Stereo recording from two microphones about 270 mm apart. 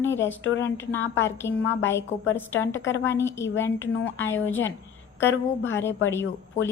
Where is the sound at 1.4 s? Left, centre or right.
Left.